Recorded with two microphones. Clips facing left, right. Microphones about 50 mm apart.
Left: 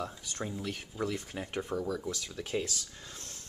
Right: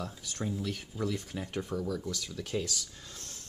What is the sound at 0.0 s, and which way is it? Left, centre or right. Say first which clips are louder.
Speech: even; centre.